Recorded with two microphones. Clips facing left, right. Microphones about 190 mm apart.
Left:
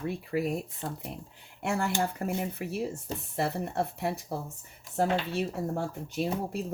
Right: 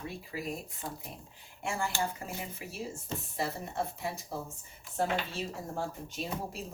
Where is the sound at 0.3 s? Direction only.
60° left (ahead or behind).